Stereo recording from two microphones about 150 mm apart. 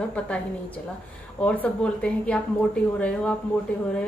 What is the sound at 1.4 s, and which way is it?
Speech, 10° left (ahead or behind).